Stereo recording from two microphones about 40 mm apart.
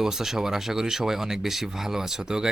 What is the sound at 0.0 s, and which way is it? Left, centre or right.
Speech, centre.